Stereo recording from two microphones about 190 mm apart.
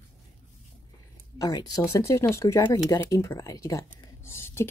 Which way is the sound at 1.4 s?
20° left (ahead or behind).